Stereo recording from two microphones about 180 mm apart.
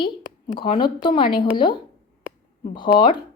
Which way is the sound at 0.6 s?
25° left (ahead or behind).